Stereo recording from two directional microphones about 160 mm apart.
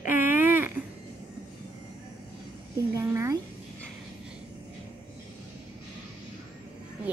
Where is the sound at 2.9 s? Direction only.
20° right (ahead or behind).